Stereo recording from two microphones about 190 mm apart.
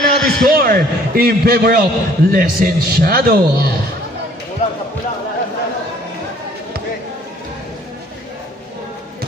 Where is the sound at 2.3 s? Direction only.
50° right (ahead or behind).